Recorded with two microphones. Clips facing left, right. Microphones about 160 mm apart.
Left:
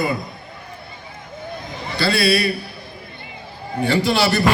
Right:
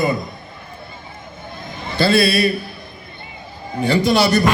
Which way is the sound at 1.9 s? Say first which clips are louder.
Right 3 dB; 20° right (ahead or behind).